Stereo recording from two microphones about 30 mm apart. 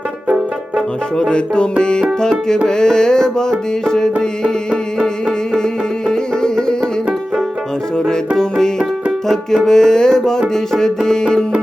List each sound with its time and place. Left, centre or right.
2.6 s music: left
6.4 s music: left
7.9 s music: left
9.6 s music: centre